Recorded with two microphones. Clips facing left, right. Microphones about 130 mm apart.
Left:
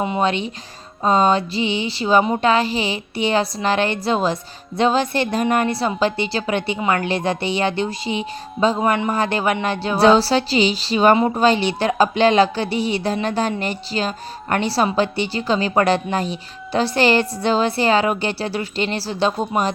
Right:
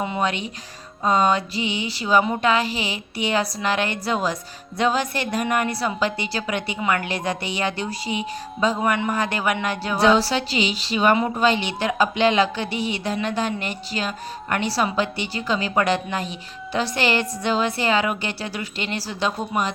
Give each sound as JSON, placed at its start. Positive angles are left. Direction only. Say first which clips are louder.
{"t": 0.0, "sound": "a woman's voice", "louder": "left 4 dB", "side_deg": 25}